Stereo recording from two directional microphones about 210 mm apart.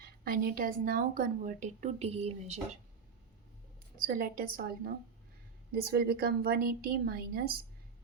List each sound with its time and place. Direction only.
0.0 s speech: 45° right (ahead or behind)
3.9 s a woman's voice: 40° right (ahead or behind)